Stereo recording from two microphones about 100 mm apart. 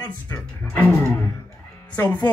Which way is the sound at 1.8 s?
15° left (ahead or behind).